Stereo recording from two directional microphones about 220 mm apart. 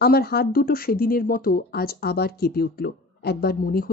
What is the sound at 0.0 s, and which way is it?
A woman's voice, 45° left (ahead or behind).